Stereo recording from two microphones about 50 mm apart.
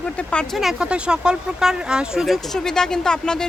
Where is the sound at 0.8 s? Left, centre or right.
Centre.